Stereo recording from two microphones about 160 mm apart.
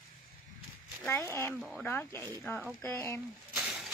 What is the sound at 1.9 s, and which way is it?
Speech, 15° left (ahead or behind).